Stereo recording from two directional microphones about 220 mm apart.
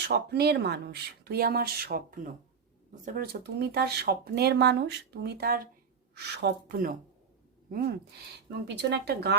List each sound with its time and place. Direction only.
0.0 s speech: 45° right (ahead or behind)
8.7 s speech: 50° right (ahead or behind)